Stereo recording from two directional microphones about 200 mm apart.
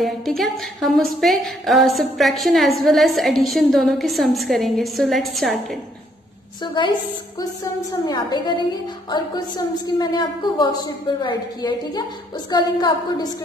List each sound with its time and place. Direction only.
0.0 s a woman's voice: centre (ahead or behind)
6.6 s a woman's voice: 25° left (ahead or behind)
8.0 s a woman's voice: 20° left (ahead or behind)
9.8 s a woman's voice: 20° left (ahead or behind)